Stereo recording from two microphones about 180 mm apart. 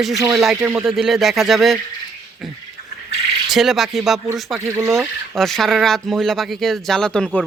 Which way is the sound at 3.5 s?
Centre (ahead or behind).